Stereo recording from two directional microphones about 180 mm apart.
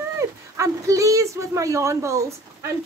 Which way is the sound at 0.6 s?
15° right (ahead or behind).